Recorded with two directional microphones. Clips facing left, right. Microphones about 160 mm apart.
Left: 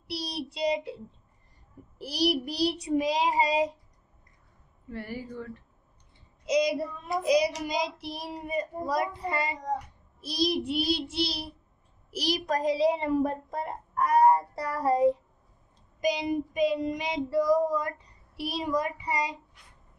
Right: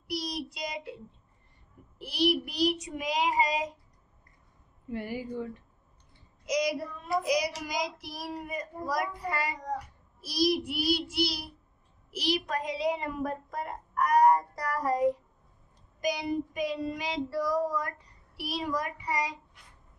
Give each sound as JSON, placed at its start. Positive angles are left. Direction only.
{"t": 0.1, "sound": "child singing", "side_deg": 30}
{"t": 4.8, "sound": "a woman's voice", "side_deg": -15}
{"t": 6.4, "sound": "child singing", "side_deg": 25}
{"t": 12.1, "sound": "child singing", "side_deg": 40}